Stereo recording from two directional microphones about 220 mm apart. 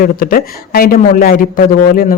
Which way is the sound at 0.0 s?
40° left (ahead or behind).